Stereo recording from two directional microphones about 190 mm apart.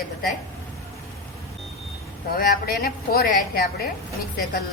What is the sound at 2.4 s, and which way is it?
Speech, 50° left (ahead or behind).